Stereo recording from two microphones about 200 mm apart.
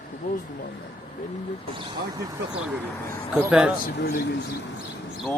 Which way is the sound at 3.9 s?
55° left (ahead or behind).